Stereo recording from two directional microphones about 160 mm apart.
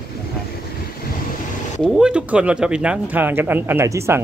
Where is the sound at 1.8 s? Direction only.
5° right (ahead or behind).